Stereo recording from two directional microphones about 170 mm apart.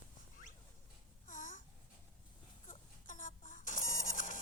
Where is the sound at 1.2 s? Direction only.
50° left (ahead or behind).